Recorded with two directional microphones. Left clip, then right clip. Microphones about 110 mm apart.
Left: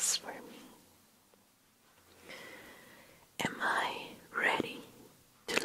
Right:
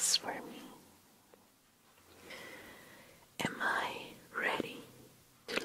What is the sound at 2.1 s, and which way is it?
Whispering, centre (ahead or behind).